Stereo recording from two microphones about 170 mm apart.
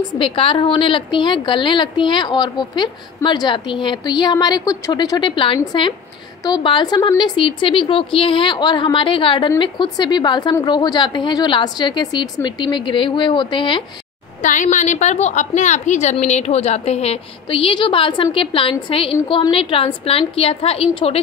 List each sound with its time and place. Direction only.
0.2 s a woman's voice: 30° left (ahead or behind)
14.4 s a woman's voice: 50° left (ahead or behind)